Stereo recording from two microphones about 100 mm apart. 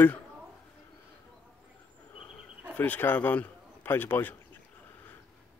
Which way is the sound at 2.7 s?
15° left (ahead or behind).